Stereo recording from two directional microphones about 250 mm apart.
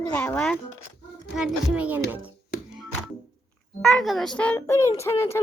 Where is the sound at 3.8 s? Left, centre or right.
Centre.